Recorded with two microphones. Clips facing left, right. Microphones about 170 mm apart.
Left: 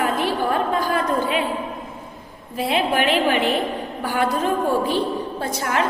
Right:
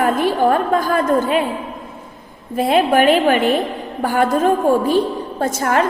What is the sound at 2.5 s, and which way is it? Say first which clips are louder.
A woman's voice: right 6 dB; 50° right (ahead or behind).